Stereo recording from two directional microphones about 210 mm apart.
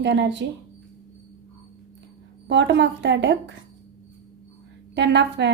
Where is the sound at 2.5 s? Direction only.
55° right (ahead or behind).